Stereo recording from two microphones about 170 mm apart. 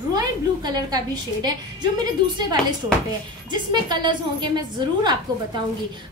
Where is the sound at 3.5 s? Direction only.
25° right (ahead or behind).